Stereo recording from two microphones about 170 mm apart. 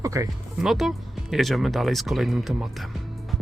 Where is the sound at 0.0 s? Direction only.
20° right (ahead or behind).